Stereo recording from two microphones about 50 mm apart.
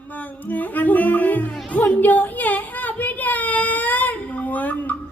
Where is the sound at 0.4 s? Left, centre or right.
Left.